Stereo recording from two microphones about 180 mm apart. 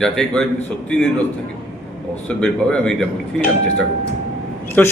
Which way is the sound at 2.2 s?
5° left (ahead or behind).